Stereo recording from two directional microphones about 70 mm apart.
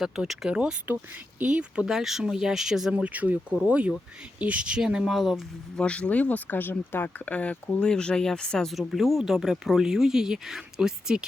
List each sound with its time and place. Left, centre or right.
0.0 s speech: centre
2.9 s speech: right; by 5.4 s centre
5.7 s speech: centre